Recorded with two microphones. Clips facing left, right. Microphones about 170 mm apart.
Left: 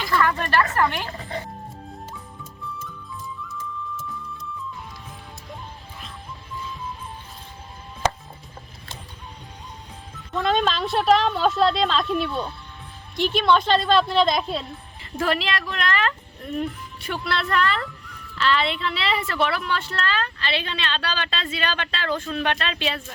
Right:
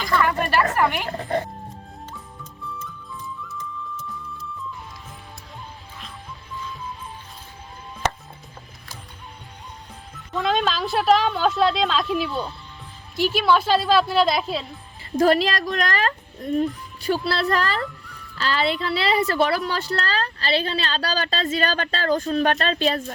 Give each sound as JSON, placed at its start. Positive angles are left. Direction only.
{"t": 0.2, "sound": "speech", "side_deg": -10}
{"t": 1.1, "sound": "speech", "side_deg": -50}
{"t": 3.5, "sound": "music", "side_deg": 0}
{"t": 10.3, "sound": "a woman's voice", "side_deg": 0}
{"t": 15.1, "sound": "speech", "side_deg": -40}